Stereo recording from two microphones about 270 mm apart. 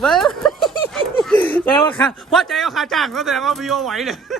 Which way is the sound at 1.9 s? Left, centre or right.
Centre.